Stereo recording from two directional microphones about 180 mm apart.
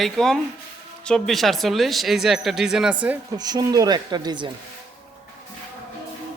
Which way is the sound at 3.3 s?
20° right (ahead or behind).